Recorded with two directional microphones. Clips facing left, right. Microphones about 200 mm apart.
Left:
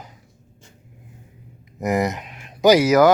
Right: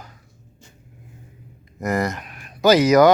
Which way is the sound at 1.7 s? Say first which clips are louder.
Left 2 dB; 20° left (ahead or behind).